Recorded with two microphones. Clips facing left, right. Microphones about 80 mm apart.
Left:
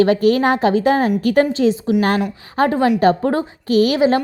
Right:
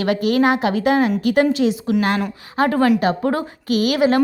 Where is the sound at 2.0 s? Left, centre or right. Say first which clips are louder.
Left 2 dB; left.